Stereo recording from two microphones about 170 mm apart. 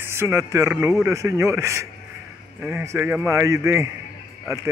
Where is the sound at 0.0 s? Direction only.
15° right (ahead or behind).